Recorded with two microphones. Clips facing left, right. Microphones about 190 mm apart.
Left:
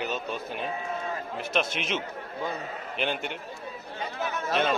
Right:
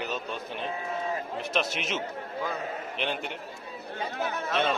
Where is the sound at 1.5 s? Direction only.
Centre (ahead or behind).